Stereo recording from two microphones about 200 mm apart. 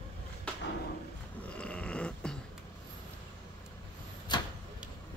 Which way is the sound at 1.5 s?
5° left (ahead or behind).